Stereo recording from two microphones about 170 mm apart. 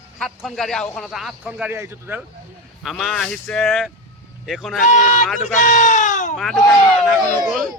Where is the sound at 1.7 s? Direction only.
15° right (ahead or behind).